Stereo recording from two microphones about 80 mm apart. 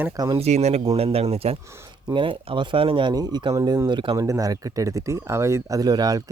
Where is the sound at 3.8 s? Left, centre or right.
Right.